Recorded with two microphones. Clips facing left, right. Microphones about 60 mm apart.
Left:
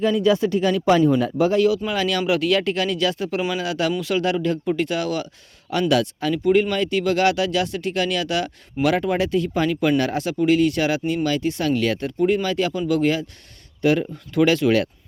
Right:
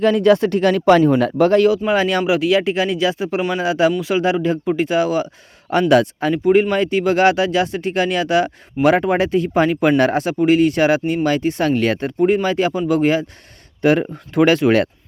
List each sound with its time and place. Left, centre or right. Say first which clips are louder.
0.0 s speech: right 5 dB; right
1.9 s speech: right 6 dB; right
2.2 s speech: right 4 dB; centre
5.9 s speech: right 6 dB; right